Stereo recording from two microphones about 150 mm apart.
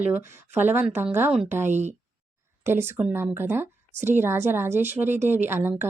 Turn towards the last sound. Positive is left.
turn(degrees=-15)  # may be behind; listen again after turning